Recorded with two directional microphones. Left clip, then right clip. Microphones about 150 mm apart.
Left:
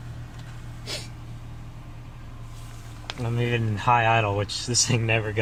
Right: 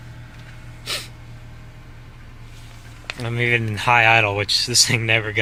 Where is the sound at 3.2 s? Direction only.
20° right (ahead or behind).